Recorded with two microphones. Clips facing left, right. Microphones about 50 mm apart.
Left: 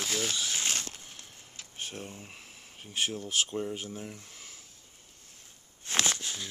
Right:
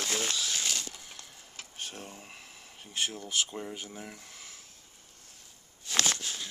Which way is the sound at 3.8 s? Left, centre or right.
Right.